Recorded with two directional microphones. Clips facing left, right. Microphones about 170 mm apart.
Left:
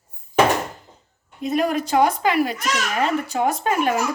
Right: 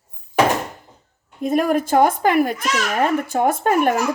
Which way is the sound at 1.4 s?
50° right (ahead or behind).